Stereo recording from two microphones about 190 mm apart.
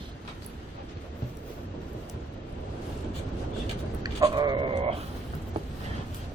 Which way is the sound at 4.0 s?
20° right (ahead or behind).